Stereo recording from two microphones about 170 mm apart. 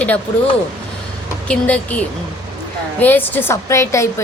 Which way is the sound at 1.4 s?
10° left (ahead or behind).